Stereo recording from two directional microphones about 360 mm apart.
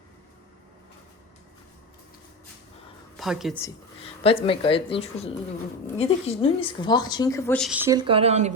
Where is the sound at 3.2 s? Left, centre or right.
Centre.